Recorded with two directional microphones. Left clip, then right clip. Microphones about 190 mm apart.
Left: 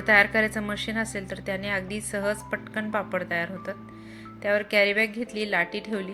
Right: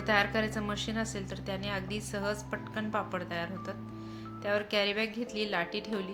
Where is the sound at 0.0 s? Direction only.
15° left (ahead or behind).